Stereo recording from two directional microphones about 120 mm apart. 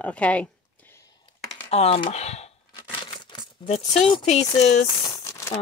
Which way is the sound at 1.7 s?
55° left (ahead or behind).